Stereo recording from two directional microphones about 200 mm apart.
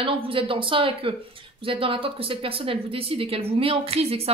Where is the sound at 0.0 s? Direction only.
25° right (ahead or behind).